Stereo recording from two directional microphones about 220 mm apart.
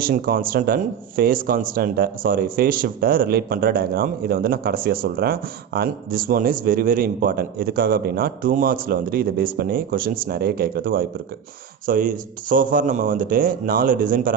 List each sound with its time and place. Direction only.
0.0 s speech: 40° right (ahead or behind)